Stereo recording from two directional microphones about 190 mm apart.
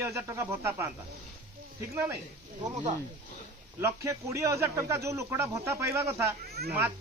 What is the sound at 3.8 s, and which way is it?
A man's voice, 15° right (ahead or behind).